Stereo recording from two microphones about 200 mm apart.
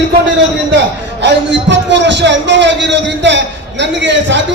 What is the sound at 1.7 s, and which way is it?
A man's voice, 65° right (ahead or behind).